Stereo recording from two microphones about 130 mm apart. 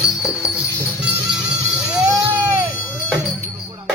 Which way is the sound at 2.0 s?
25° right (ahead or behind).